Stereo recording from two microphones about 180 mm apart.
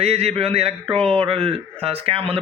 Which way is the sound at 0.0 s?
35° right (ahead or behind).